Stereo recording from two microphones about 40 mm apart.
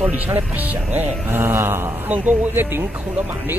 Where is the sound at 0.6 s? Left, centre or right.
Right.